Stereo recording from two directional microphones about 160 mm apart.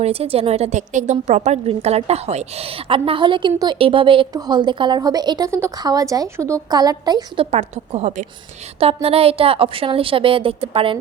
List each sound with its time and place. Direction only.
0.0 s a woman's voice: 40° right (ahead or behind)
7.5 s a woman's voice: 40° right (ahead or behind)